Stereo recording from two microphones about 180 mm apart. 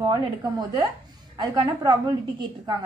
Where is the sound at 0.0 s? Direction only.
25° right (ahead or behind).